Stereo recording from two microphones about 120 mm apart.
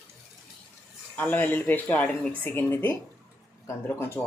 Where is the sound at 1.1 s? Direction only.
15° left (ahead or behind).